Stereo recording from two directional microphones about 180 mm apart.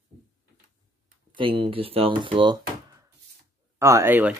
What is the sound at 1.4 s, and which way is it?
Speech, 30° right (ahead or behind).